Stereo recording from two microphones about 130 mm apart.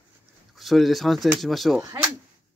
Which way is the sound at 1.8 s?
25° right (ahead or behind).